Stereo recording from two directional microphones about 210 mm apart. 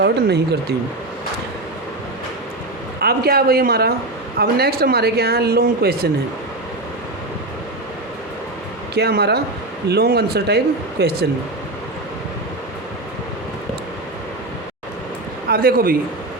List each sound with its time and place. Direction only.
0.0 s speech: 50° right (ahead or behind)
3.0 s speech: 45° right (ahead or behind)
9.0 s speech: 50° right (ahead or behind)
15.4 s a man's voice: 45° right (ahead or behind)